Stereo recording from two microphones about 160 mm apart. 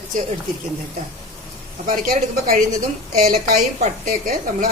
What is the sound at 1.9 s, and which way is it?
A woman's voice, 65° right (ahead or behind).